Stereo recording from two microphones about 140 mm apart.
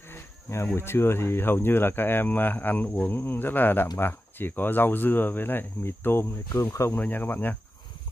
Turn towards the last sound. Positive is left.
turn(degrees=15)  # may be behind; listen again after turning